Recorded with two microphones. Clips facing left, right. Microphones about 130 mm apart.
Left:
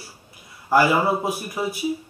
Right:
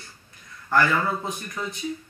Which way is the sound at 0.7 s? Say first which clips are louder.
Left 4 dB; 10° left (ahead or behind).